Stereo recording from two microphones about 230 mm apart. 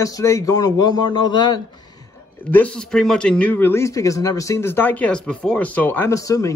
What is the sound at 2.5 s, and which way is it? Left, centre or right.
A man's voice, centre.